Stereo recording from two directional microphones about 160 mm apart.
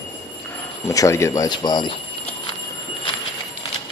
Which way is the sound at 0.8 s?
20° left (ahead or behind).